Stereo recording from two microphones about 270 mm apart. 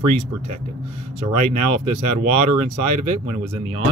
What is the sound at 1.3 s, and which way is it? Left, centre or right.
Speech, right.